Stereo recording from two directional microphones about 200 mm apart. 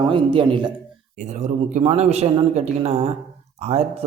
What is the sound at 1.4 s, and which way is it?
Speech, 35° right (ahead or behind).